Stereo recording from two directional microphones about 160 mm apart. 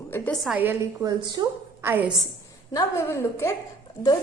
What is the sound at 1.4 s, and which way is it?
Speech, 25° right (ahead or behind).